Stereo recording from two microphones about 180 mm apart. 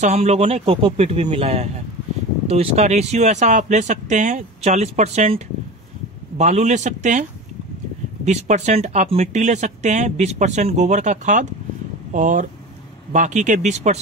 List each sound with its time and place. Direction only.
0.0 s speech: 35° right (ahead or behind)
8.3 s speech: 40° right (ahead or behind)